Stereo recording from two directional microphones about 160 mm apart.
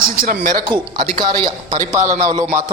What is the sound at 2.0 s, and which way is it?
Speech, 50° right (ahead or behind).